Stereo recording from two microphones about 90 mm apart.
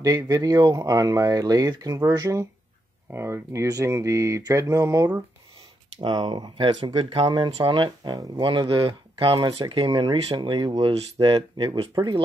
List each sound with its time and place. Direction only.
0.0 s speech: 40° right (ahead or behind)
2.0 s mantra: 40° right (ahead or behind)
3.1 s mantra: 30° right (ahead or behind)
5.9 s speech: 60° right (ahead or behind)
11.9 s speech: 50° right (ahead or behind)